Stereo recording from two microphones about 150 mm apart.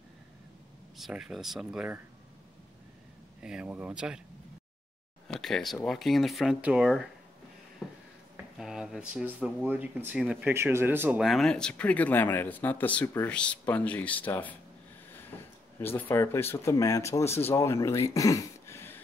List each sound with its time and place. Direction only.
0.9 s speech: 5° right (ahead or behind)
3.4 s speech: 5° right (ahead or behind)
5.3 s speech: centre (ahead or behind)
7.8 s a sound: 5° right (ahead or behind)
8.5 s speech: 5° right (ahead or behind)
10.5 s speech: 15° right (ahead or behind)
11.1 s speech: centre (ahead or behind)
15.3 s a sound: 15° left (ahead or behind)
15.8 s speech: 15° left (ahead or behind)